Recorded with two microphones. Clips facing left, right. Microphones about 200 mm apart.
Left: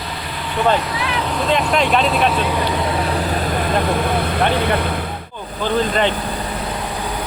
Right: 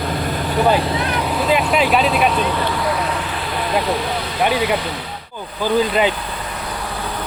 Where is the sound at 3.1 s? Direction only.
40° left (ahead or behind).